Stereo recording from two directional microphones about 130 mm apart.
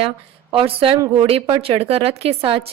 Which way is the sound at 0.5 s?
45° right (ahead or behind).